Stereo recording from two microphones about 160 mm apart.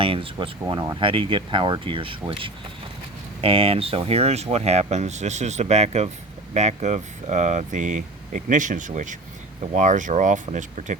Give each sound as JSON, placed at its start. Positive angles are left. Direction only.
{"t": 0.0, "sound": "speech", "side_deg": -35}
{"t": 3.4, "sound": "speech", "side_deg": -35}